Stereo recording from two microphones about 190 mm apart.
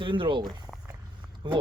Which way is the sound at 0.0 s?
25° right (ahead or behind).